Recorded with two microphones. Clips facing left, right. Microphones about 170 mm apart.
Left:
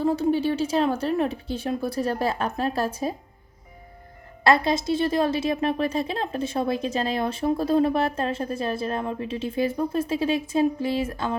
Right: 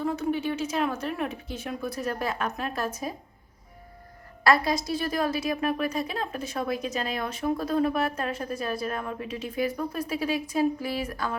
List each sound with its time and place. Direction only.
0.0 s a woman's voice: 30° left (ahead or behind)
4.4 s a woman's voice: 25° left (ahead or behind)